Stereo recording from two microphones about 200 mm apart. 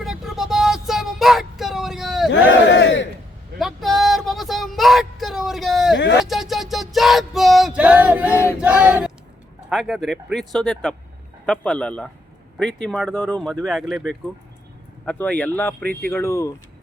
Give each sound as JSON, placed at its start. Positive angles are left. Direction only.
{"t": 0.0, "sound": "child singing", "side_deg": 0}
{"t": 2.3, "sound": "battle cry", "side_deg": 65}
{"t": 3.6, "sound": "a sound", "side_deg": 0}
{"t": 5.9, "sound": "a sound", "side_deg": 65}
{"t": 6.2, "sound": "music", "side_deg": 0}
{"t": 8.6, "sound": "female singing", "side_deg": -5}
{"t": 9.6, "sound": "speech", "side_deg": 0}